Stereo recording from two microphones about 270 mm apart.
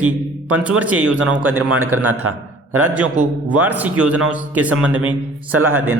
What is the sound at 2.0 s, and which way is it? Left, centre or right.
Speech, right.